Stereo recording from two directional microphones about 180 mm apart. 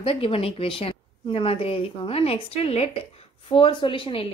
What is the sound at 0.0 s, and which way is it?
A woman's voice, 30° left (ahead or behind).